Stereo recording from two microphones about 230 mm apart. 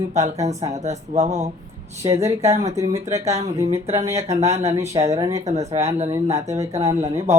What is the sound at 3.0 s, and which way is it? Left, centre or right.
Speech, right.